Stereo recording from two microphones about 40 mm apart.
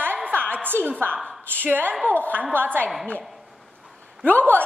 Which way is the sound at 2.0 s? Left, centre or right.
Left.